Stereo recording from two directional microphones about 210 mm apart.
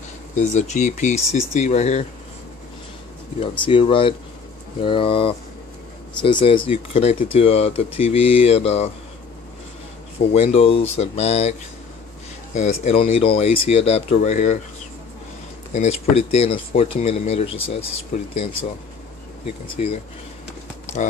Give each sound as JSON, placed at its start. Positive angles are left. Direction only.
{"t": 0.4, "sound": "speech", "side_deg": 35}
{"t": 3.3, "sound": "speech", "side_deg": 25}
{"t": 10.3, "sound": "speech", "side_deg": 30}
{"t": 12.5, "sound": "speech", "side_deg": 30}
{"t": 15.7, "sound": "speech", "side_deg": 30}
{"t": 19.7, "sound": "speech", "side_deg": 30}
{"t": 20.8, "sound": "run", "side_deg": 35}